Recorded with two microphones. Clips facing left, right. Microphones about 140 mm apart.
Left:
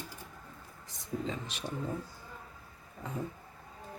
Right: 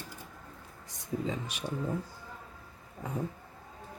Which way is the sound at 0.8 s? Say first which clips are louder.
Right 2 dB; 10° right (ahead or behind).